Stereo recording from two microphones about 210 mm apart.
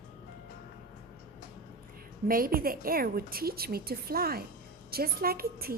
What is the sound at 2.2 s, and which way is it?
A woman's voice, 45° right (ahead or behind).